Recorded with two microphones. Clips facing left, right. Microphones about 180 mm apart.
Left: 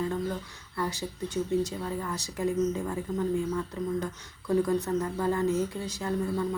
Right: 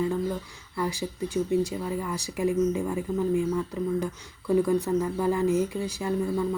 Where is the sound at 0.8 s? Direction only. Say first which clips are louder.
Right 3 dB; 10° right (ahead or behind).